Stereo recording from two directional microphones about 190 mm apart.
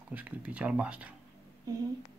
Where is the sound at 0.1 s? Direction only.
10° right (ahead or behind).